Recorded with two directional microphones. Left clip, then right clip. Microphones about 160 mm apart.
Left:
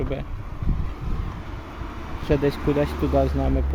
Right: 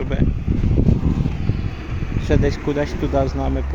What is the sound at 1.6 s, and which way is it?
Vehicle, 15° left (ahead or behind).